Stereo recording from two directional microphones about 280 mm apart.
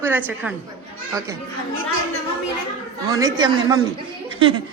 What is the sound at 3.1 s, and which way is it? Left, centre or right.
A woman's voice, centre.